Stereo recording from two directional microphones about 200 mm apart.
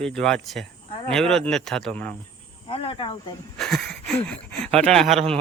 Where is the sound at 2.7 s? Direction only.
25° left (ahead or behind).